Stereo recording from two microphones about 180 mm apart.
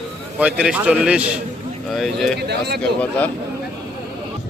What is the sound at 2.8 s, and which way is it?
Speech, 10° left (ahead or behind).